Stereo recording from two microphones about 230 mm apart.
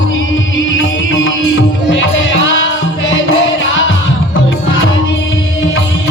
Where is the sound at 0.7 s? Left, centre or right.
Left.